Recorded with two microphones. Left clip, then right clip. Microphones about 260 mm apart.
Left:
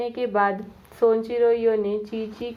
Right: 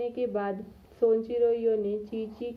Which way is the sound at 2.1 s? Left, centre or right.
Left.